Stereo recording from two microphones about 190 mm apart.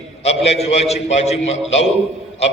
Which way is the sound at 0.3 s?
35° left (ahead or behind).